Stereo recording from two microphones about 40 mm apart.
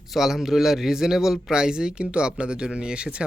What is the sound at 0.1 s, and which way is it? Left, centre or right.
Speech, centre.